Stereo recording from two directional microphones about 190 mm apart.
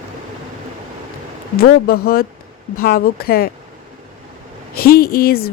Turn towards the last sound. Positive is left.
turn(degrees=55)  # may be behind; listen again after turning